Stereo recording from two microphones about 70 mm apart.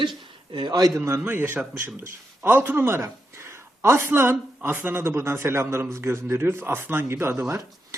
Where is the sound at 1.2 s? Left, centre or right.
Right.